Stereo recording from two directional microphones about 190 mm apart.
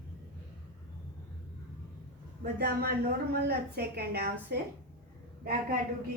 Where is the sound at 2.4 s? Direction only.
55° right (ahead or behind).